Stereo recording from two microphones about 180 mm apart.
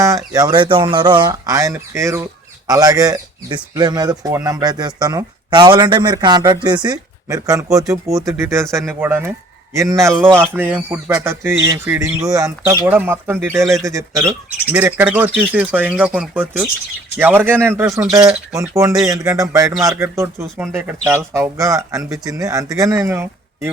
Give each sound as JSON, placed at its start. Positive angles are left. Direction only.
{"t": 0.3, "sound": "speech", "side_deg": -25}